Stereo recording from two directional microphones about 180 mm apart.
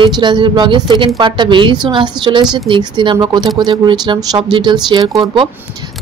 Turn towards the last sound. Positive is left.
turn(degrees=-25)  # may be behind; listen again after turning